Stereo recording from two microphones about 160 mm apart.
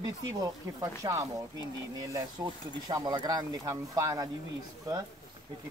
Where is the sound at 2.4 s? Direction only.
20° right (ahead or behind).